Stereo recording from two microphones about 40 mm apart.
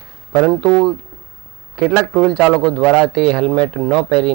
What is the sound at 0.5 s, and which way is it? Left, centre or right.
Speech, centre.